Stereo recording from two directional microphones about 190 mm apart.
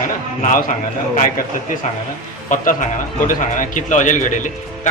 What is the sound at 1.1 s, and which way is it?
A man's voice, 45° left (ahead or behind).